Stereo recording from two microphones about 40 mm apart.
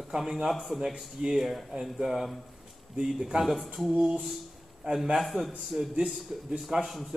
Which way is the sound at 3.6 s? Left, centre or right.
Centre.